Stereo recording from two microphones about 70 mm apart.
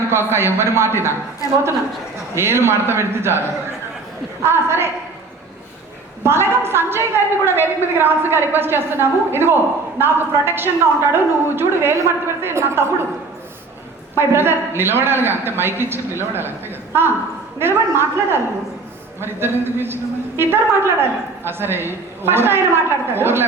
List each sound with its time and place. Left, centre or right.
0.1 s a man's voice: right
2.3 s a man's voice: right
4.4 s a man's voice: right
6.2 s a man's voice: right
14.2 s a man's voice: right